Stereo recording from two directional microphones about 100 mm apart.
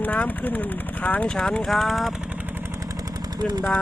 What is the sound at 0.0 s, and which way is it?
Speech, 15° left (ahead or behind).